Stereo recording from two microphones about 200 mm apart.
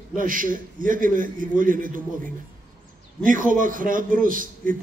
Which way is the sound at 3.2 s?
40° right (ahead or behind).